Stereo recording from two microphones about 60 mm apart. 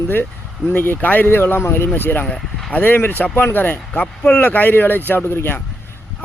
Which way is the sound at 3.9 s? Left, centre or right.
Left.